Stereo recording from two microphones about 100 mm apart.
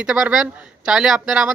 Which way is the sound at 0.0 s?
10° right (ahead or behind).